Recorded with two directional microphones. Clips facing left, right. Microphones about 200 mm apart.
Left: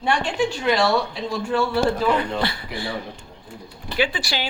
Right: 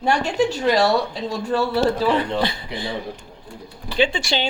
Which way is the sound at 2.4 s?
20° right (ahead or behind).